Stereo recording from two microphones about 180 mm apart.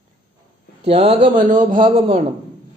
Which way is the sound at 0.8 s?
35° right (ahead or behind).